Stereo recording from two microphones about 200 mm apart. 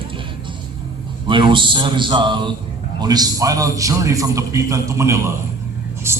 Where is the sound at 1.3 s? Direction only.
25° right (ahead or behind).